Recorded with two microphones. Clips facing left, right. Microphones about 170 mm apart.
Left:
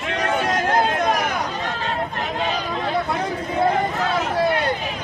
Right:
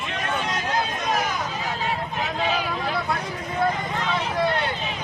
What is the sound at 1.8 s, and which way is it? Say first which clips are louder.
Run: left 1 dB; 5° right (ahead or behind).